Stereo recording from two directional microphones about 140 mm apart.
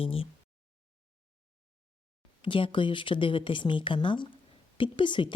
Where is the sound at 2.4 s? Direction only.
35° left (ahead or behind).